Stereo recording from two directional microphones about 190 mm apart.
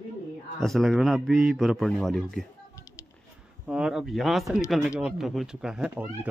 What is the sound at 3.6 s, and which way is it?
A man's voice, 5° right (ahead or behind).